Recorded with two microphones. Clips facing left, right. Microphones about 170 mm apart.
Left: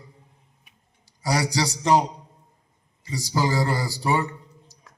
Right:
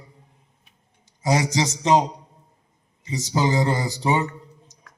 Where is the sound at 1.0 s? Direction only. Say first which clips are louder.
Right 3 dB; 20° right (ahead or behind).